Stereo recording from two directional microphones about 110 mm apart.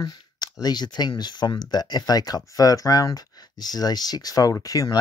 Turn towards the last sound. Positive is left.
turn(degrees=35)  # may be behind; listen again after turning